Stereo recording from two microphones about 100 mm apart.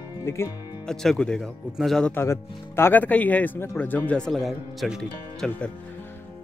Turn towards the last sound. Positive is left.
turn(degrees=15)  # may be behind; listen again after turning